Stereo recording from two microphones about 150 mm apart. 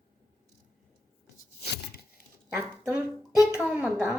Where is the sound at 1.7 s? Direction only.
90° left.